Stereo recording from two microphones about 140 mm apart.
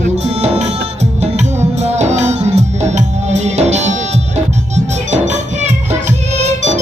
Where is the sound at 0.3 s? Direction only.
50° right (ahead or behind).